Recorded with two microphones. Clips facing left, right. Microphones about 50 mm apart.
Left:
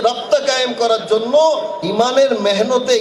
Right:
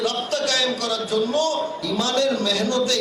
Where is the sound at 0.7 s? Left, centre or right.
Left.